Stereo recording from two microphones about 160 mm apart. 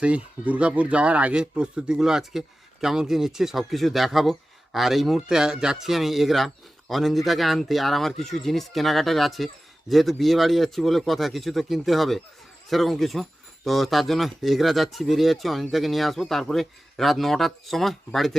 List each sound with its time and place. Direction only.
0.0 s speech: 10° right (ahead or behind)